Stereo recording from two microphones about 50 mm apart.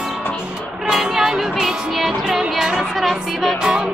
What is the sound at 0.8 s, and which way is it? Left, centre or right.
Music, centre.